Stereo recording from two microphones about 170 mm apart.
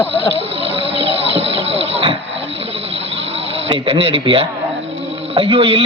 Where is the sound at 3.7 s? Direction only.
35° right (ahead or behind).